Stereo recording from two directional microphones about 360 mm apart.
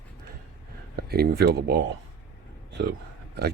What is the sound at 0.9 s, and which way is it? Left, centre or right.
Speech, right.